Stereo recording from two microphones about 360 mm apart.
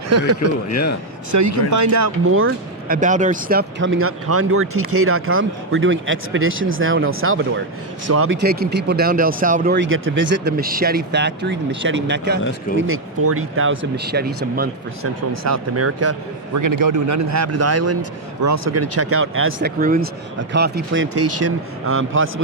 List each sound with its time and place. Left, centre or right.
0.1 s speech: right
0.7 s speech: left
1.3 s a man's voice: right
2.9 s speech: right
15.0 s speech: right
16.6 s a man's voice: right